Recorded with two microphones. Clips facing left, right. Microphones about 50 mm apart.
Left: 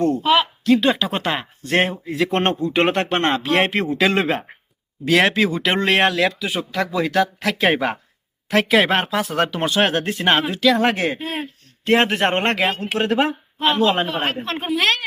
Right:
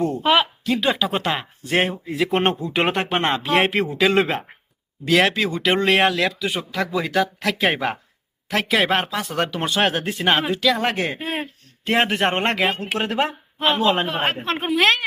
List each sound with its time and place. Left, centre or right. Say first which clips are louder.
0.2 s speech: left 1 dB; centre
11.2 s a woman's voice: even; centre